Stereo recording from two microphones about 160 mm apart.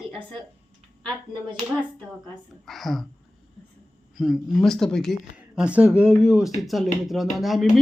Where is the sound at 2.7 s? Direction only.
Centre (ahead or behind).